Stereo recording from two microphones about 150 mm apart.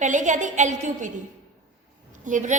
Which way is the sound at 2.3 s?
55° right (ahead or behind).